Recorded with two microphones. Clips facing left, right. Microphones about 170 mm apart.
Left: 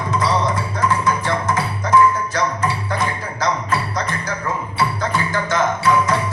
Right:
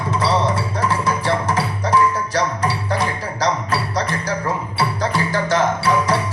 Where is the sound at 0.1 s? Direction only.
30° right (ahead or behind).